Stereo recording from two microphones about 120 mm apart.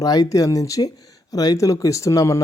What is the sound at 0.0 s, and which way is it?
Speech, 30° left (ahead or behind).